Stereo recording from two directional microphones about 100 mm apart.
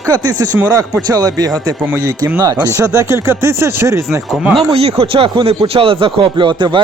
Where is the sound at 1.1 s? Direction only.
40° right (ahead or behind).